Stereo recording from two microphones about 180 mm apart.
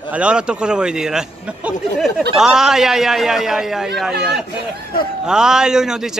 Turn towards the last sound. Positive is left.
turn(degrees=-5)  # may be behind; listen again after turning